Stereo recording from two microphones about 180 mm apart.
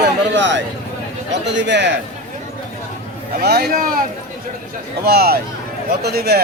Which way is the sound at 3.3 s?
60° right (ahead or behind).